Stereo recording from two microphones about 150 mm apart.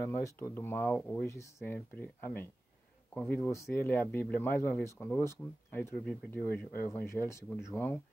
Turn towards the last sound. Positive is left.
turn(degrees=15)  # may be behind; listen again after turning